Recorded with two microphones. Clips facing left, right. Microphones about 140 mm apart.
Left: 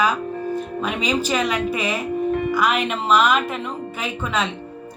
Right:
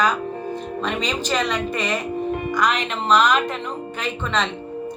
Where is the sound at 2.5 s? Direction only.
5° left (ahead or behind).